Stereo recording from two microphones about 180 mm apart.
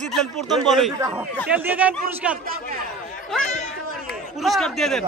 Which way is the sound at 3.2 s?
5° left (ahead or behind).